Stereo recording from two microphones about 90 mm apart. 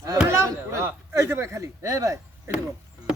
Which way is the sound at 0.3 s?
35° right (ahead or behind).